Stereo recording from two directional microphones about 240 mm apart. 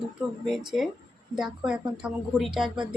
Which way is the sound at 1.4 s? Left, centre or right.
Centre.